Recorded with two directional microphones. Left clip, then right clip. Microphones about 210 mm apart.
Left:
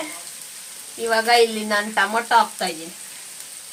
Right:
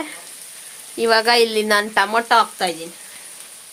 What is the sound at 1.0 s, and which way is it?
Speech, 55° right (ahead or behind).